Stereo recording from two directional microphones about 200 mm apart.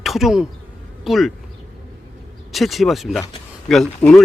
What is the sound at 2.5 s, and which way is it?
Speech, centre (ahead or behind).